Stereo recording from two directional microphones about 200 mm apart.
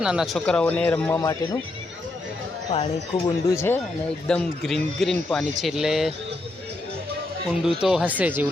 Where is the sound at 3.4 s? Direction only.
15° left (ahead or behind).